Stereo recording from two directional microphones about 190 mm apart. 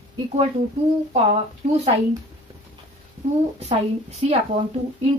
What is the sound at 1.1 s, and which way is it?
Speech, 35° right (ahead or behind).